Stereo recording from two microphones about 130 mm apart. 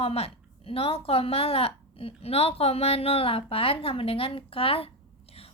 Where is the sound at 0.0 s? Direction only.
50° left (ahead or behind).